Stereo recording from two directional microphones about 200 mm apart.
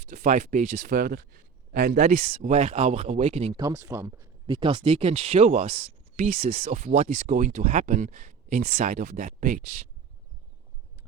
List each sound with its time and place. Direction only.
0.1 s speech: 40° right (ahead or behind)
3.6 s speech: 15° right (ahead or behind); by 9.7 s 40° right (ahead or behind)